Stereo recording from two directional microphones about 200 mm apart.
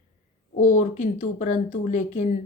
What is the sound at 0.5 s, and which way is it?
Speech, 40° left (ahead or behind).